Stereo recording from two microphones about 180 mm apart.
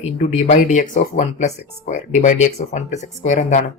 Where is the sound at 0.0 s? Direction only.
35° left (ahead or behind).